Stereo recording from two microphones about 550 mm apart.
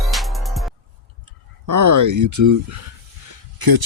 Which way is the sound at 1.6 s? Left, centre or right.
Right.